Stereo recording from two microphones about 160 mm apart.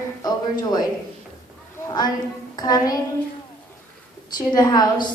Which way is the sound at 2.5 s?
25° left (ahead or behind).